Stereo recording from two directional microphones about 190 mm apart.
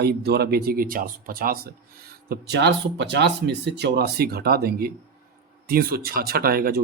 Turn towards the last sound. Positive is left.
turn(degrees=-50)  # may be behind; listen again after turning